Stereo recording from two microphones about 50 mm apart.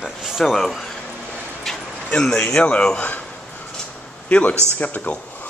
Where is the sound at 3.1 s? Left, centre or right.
Left.